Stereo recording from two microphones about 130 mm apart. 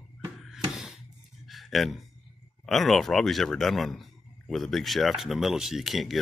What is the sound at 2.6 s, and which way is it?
Speech, centre (ahead or behind).